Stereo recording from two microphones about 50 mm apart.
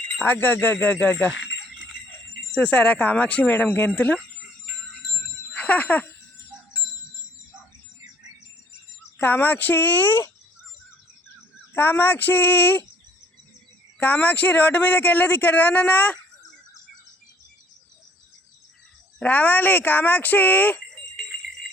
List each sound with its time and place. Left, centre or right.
0.3 s speech: left
2.6 s speech: left
3.5 s speech: left
5.5 s bicycle bell: left
9.1 s speech: left
11.7 s speech: left
14.0 s speech: left
19.2 s speech: left